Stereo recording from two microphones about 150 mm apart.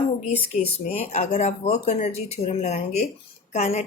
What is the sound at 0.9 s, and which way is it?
Speech, 50° left (ahead or behind).